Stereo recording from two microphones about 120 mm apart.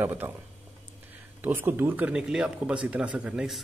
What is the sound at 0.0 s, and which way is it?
Speech, 20° right (ahead or behind).